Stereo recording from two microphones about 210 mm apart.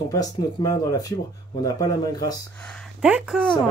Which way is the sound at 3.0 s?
5° right (ahead or behind).